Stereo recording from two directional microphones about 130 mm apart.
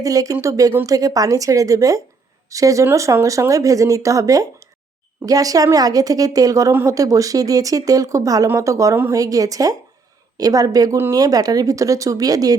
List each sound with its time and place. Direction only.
0.0 s a woman's voice: 25° right (ahead or behind)